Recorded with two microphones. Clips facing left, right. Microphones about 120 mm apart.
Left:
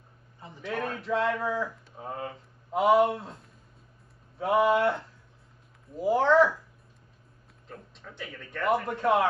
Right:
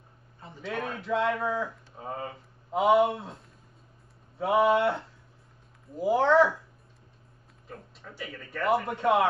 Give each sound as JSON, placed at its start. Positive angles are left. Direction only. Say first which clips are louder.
{"t": 0.7, "sound": "speech", "louder": "left 1 dB", "side_deg": 0}
{"t": 4.4, "sound": "speech", "louder": "even", "side_deg": 0}
{"t": 7.6, "sound": "speech", "louder": "right 1 dB", "side_deg": -5}